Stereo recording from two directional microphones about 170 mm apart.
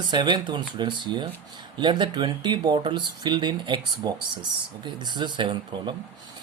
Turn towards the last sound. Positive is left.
turn(degrees=-25)  # may be behind; listen again after turning